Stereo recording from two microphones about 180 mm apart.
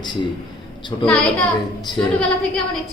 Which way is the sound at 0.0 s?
25° left (ahead or behind).